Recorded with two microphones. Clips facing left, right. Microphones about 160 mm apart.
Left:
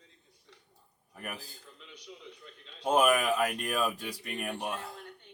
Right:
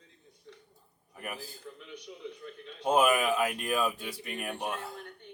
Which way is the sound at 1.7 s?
55° right (ahead or behind).